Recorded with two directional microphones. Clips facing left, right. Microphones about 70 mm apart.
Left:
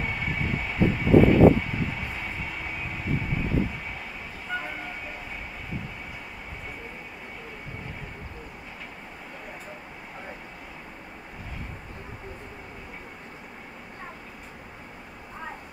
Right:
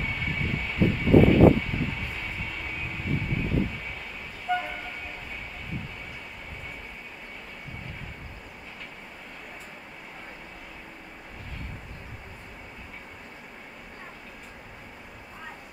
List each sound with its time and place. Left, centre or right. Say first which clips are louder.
0.0 s vehicle: left 1 dB; centre